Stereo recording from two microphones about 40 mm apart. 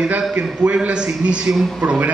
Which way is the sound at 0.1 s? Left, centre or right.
Right.